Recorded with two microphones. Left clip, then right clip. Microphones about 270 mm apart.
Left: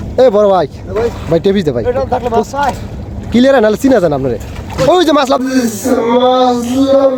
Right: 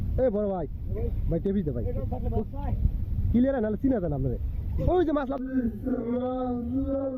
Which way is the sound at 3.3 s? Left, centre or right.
Centre.